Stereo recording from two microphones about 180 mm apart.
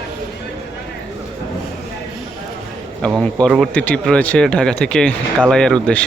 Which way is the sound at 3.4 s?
Centre (ahead or behind).